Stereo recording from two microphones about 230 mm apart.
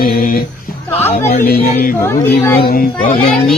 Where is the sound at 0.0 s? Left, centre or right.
Left.